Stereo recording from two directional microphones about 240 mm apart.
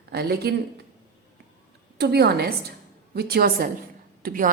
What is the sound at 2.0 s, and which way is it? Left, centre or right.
A woman's voice, right.